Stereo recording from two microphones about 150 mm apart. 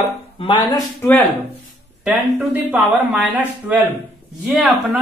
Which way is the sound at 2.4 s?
5° right (ahead or behind).